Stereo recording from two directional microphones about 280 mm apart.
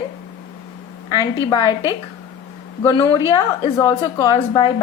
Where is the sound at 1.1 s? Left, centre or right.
Centre.